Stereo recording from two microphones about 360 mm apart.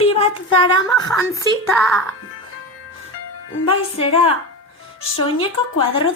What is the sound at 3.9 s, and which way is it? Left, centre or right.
Speech, centre.